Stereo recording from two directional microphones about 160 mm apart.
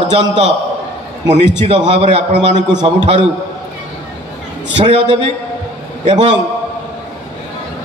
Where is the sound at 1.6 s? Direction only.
45° right (ahead or behind).